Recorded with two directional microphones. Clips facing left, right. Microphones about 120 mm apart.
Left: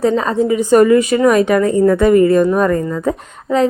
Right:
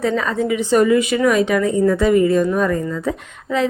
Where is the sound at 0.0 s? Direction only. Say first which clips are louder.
Left 5 dB; 35° left (ahead or behind).